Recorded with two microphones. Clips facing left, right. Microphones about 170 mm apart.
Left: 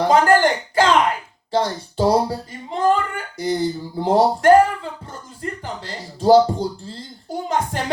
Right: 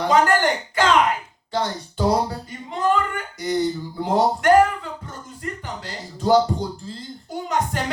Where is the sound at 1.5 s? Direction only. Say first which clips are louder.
Left 4 dB; 35° left (ahead or behind).